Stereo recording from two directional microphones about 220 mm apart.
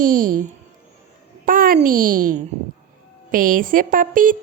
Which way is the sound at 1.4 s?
40° right (ahead or behind).